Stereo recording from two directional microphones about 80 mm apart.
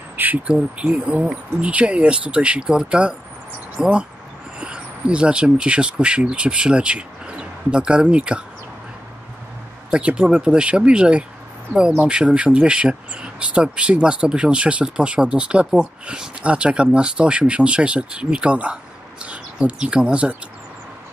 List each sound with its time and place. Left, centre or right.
0.1 s a sound: right
0.6 s speech: centre
9.8 s speech: centre